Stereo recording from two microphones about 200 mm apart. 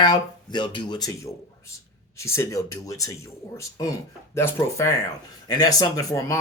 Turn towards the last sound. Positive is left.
turn(degrees=15)  # may be behind; listen again after turning